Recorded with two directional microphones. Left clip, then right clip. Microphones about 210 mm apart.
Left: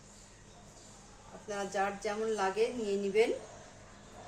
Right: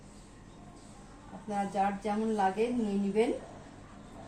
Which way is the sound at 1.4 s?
45° left (ahead or behind).